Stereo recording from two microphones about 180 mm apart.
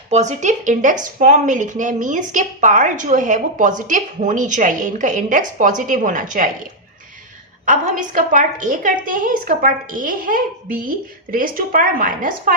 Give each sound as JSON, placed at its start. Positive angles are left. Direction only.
{"t": 0.1, "sound": "a woman's voice", "side_deg": -40}